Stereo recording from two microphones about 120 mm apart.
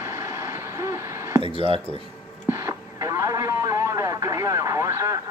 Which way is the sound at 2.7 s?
25° right (ahead or behind).